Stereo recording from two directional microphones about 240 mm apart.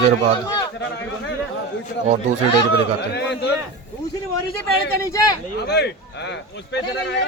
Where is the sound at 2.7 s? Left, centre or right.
Left.